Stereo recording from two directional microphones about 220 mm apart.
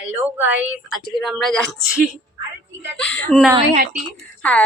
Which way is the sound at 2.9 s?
5° left (ahead or behind).